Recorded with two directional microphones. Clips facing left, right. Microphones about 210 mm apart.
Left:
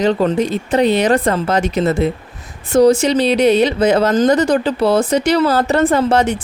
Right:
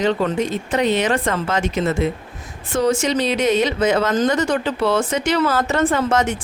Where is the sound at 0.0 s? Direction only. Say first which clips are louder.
Left 4 dB; 35° left (ahead or behind).